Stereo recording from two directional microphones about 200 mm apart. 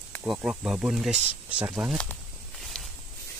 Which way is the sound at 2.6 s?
Centre (ahead or behind).